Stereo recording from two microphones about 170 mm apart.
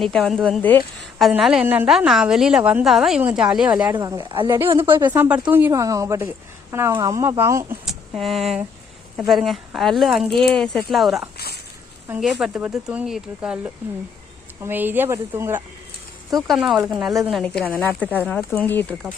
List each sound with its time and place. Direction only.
0.0 s a woman's voice: centre (ahead or behind)
3.9 s speech: 20° right (ahead or behind)
4.9 s speech: 15° right (ahead or behind)
7.9 s a woman's voice: centre (ahead or behind)
11.3 s a sound: 70° left (ahead or behind)
12.2 s a woman's voice: 5° right (ahead or behind)
14.6 s speech: 10° right (ahead or behind)
16.5 s a woman's voice: centre (ahead or behind)
18.0 s speech: 10° right (ahead or behind)
18.3 s speech: 10° left (ahead or behind)